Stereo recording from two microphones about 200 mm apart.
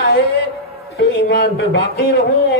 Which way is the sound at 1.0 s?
60° left (ahead or behind).